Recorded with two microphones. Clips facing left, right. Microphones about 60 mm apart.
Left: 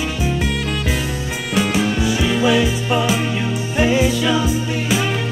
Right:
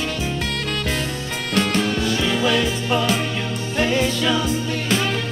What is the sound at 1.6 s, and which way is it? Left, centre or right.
Music, centre.